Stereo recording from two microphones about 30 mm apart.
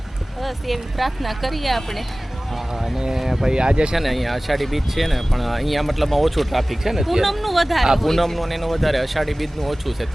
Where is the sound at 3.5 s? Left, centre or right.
Right.